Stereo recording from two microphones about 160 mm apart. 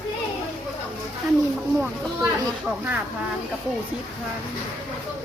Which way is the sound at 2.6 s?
10° right (ahead or behind).